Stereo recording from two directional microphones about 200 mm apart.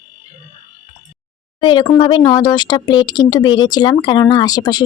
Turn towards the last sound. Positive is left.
turn(degrees=20)  # may be behind; listen again after turning